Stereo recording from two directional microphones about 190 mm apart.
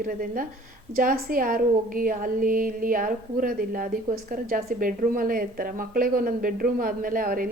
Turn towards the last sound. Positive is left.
turn(degrees=-50)  # may be behind; listen again after turning